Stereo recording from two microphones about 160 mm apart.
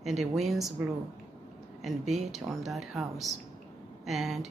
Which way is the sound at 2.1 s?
45° right (ahead or behind).